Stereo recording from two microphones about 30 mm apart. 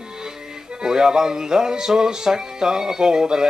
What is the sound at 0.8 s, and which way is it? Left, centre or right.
Music, centre.